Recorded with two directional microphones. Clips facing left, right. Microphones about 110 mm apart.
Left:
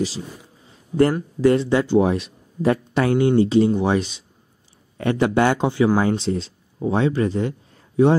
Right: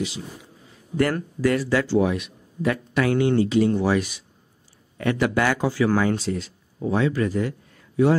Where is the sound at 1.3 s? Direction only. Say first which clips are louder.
Left 5 dB; 25° left (ahead or behind).